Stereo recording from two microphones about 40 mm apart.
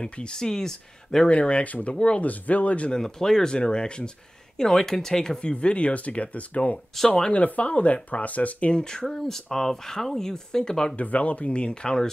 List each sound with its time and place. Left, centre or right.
0.0 s speech: left
1.3 s speech: left
2.0 s speech: left
2.2 s speech: left
2.9 s speech: centre
3.5 s speech: left
4.6 s speech: centre
5.5 s speech: left
7.1 s speech: left
7.3 s speech: left
8.7 s speech: centre
11.0 s speech: left